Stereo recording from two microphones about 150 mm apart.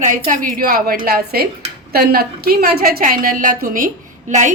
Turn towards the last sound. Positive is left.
turn(degrees=-55)  # may be behind; listen again after turning